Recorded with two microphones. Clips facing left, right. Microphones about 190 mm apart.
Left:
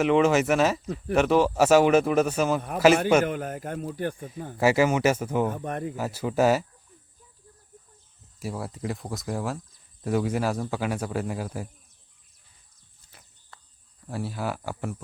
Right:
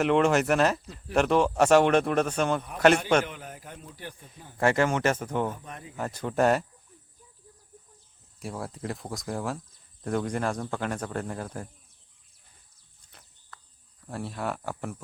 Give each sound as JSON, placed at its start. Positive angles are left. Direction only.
{"t": 0.0, "sound": "a man's voice", "side_deg": 0}
{"t": 3.2, "sound": "a man's voice", "side_deg": 50}
{"t": 4.5, "sound": "speech", "side_deg": 5}
{"t": 5.5, "sound": "speech", "side_deg": 60}
{"t": 6.0, "sound": "a man's voice", "side_deg": 5}
{"t": 8.4, "sound": "a man's voice", "side_deg": 0}
{"t": 13.1, "sound": "a sound", "side_deg": 5}
{"t": 14.1, "sound": "a man's voice", "side_deg": 0}